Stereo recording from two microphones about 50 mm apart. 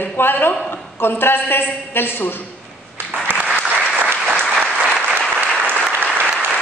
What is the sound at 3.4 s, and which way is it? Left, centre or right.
Applause, right.